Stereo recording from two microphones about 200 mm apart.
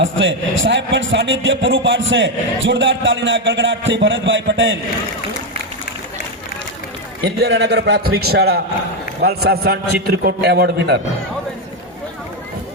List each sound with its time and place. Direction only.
0.0 s a man's voice: 70° right (ahead or behind)
7.3 s a man's voice: 55° right (ahead or behind)